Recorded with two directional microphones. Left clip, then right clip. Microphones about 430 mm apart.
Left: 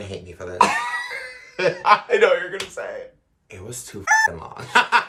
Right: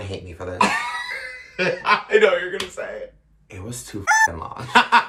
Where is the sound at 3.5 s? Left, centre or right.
Centre.